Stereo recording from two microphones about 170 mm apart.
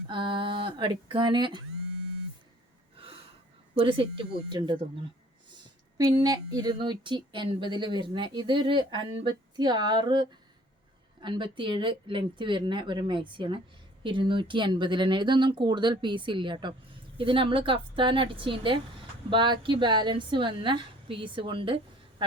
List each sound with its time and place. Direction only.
0.1 s speech: 30° right (ahead or behind)
3.8 s a woman's voice: 30° right (ahead or behind)
6.0 s a woman's voice: 20° right (ahead or behind)